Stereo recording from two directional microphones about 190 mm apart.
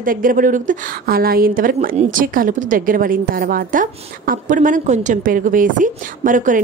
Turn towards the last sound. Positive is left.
turn(degrees=-45)  # may be behind; listen again after turning